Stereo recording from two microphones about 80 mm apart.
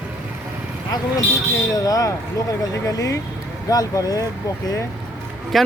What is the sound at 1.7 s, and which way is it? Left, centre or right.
Speech, left.